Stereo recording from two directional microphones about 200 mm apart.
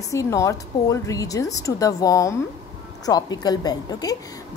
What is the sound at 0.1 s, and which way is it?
A woman's voice, 15° left (ahead or behind).